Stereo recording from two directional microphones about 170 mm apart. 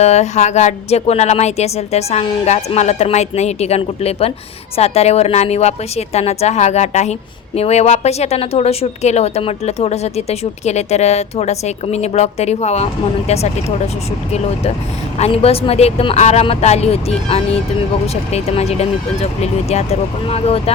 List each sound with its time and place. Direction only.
0.0 s a woman's voice: 40° left (ahead or behind)
15.2 s a woman's voice: 35° left (ahead or behind)